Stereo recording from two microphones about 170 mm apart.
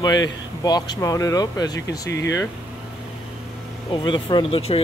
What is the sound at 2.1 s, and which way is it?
Speech, 90° left.